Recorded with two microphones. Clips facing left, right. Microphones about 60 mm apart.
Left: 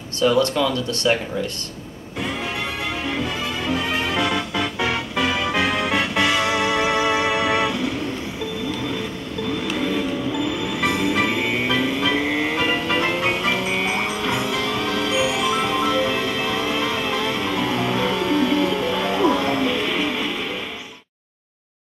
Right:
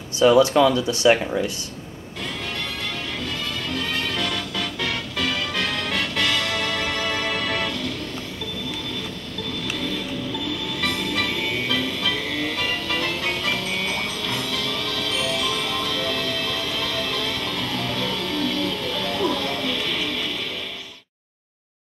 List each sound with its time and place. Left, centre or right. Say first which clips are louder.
0.2 s speech: right 3 dB; centre
3.2 s music: left 4 dB; centre
9.5 s music: left 5 dB; centre